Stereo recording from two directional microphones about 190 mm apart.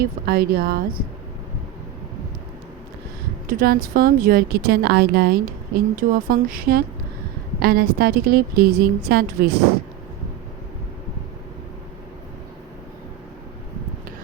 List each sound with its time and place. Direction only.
0.0 s speech: 55° right (ahead or behind)
3.4 s speech: 45° right (ahead or behind)